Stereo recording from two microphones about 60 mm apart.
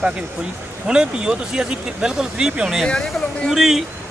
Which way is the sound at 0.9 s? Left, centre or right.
Centre.